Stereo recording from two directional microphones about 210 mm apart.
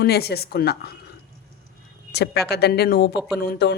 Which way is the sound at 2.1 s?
50° left (ahead or behind).